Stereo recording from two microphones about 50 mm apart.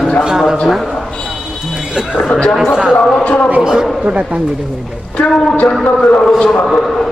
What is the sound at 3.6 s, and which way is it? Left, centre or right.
Speech, centre.